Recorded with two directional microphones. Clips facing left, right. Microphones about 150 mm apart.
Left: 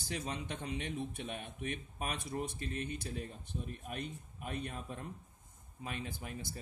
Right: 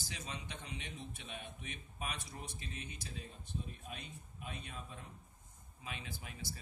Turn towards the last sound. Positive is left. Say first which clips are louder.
# left 4 dB
turn(degrees=50)  # may be behind; listen again after turning